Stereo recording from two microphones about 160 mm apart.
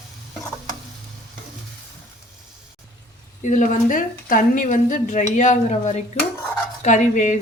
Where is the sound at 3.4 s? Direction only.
50° left (ahead or behind).